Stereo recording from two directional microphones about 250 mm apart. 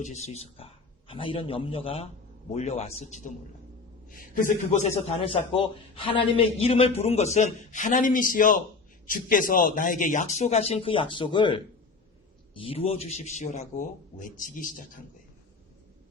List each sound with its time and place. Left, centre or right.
0.0 s a man's voice: left